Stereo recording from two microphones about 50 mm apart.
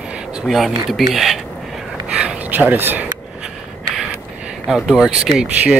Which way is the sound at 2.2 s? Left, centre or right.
Right.